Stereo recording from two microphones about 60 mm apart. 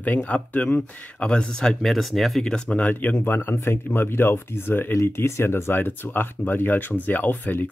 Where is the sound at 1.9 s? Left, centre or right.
Centre; by 3.2 s left.